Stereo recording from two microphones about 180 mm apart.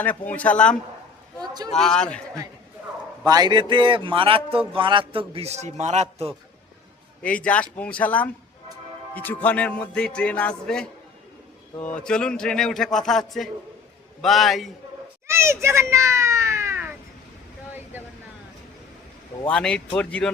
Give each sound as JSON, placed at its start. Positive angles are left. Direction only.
{"t": 0.0, "sound": "a man's voice", "side_deg": 10}
{"t": 1.4, "sound": "a man's voice", "side_deg": -20}
{"t": 1.7, "sound": "a man's voice", "side_deg": 5}
{"t": 3.2, "sound": "a man's voice", "side_deg": -20}
{"t": 7.4, "sound": "a man's voice", "side_deg": 5}
{"t": 15.3, "sound": "a sound", "side_deg": -15}
{"t": 19.5, "sound": "a man's voice", "side_deg": 5}